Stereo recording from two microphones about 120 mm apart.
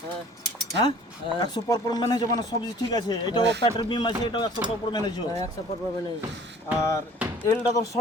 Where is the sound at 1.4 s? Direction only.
35° left (ahead or behind).